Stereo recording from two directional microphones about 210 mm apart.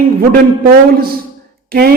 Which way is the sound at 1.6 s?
45° right (ahead or behind).